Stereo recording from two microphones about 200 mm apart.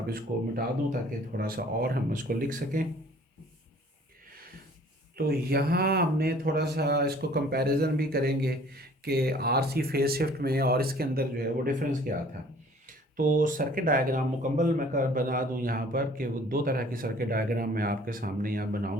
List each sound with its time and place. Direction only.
0.1 s speech: 45° right (ahead or behind)
5.1 s speech: 50° right (ahead or behind)
13.1 s speech: 40° right (ahead or behind)